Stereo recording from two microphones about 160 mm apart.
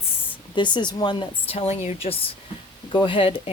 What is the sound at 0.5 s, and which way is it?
Speech, 30° left (ahead or behind).